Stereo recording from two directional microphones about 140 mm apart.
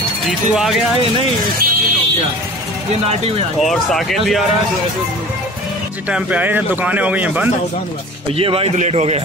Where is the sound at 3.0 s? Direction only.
45° right (ahead or behind).